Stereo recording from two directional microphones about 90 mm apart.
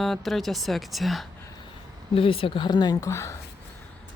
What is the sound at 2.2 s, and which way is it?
A woman's voice, 85° left.